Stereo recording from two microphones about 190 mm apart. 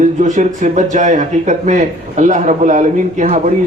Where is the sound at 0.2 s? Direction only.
40° right (ahead or behind).